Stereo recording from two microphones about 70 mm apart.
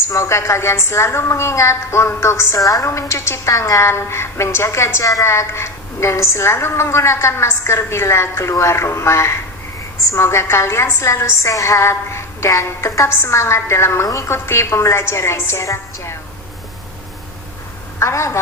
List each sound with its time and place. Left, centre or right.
0.1 s a woman's voice: left
18.0 s a woman's voice: left